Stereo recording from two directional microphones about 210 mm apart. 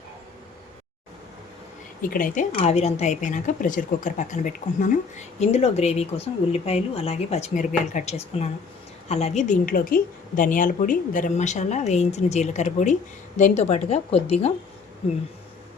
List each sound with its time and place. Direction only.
2.0 s speech: 40° left (ahead or behind)